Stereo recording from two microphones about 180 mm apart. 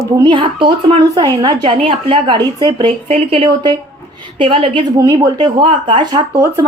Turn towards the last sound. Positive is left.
turn(degrees=-20)  # may be behind; listen again after turning